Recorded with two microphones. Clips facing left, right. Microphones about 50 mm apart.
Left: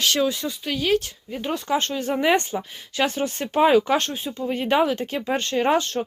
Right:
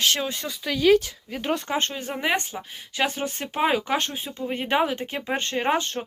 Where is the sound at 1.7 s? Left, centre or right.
Right.